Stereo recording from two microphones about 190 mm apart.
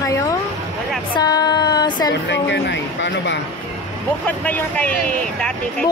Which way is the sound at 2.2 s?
65° left (ahead or behind).